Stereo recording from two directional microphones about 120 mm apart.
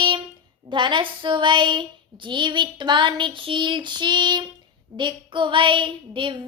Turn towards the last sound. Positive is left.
turn(degrees=-45)  # may be behind; listen again after turning